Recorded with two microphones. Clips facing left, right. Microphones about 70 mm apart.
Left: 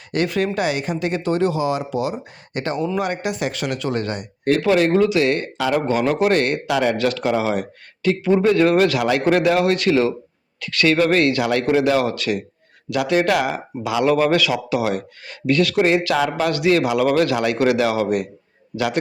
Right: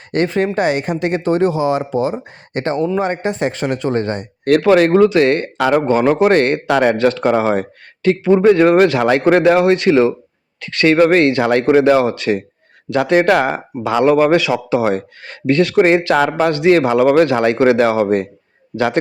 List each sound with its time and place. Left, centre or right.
0.1 s speech: right
4.4 s speech: right
5.9 s speech: right
12.9 s speech: right
16.4 s speech: right